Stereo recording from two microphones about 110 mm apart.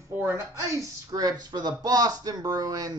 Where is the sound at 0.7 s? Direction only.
30° right (ahead or behind).